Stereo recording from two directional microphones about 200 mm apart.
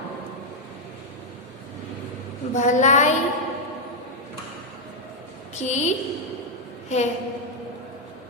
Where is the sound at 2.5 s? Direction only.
35° left (ahead or behind).